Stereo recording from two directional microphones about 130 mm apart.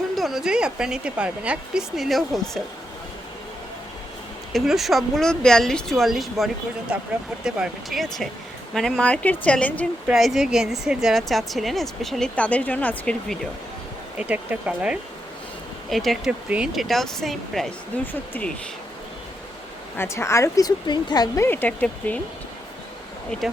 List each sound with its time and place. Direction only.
0.2 s a woman's voice: centre (ahead or behind)
4.5 s a woman's voice: centre (ahead or behind)
10.1 s a woman's voice: centre (ahead or behind)
14.2 s speech: 10° right (ahead or behind)
15.9 s a woman's voice: centre (ahead or behind)
20.0 s a woman's voice: 20° left (ahead or behind)
21.4 s speech: 15° left (ahead or behind)
23.3 s speech: 5° left (ahead or behind)